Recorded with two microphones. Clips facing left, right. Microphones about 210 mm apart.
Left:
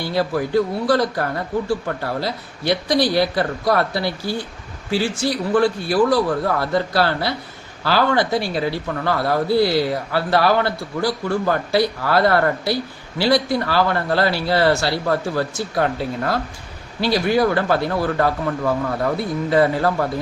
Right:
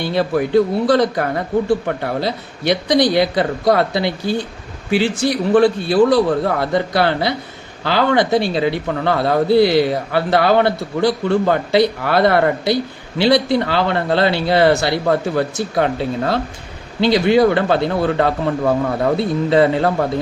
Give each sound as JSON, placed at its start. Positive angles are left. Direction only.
{"t": 0.0, "sound": "speech", "side_deg": -25}